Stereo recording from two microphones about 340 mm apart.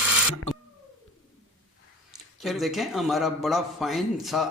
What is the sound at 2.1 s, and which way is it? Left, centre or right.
A man's voice, centre.